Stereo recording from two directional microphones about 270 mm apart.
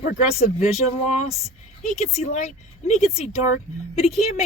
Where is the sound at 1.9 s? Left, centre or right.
Left.